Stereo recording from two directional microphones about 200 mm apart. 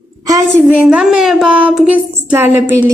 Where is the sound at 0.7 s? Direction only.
5° right (ahead or behind).